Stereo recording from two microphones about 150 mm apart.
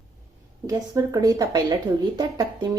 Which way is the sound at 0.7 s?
20° right (ahead or behind).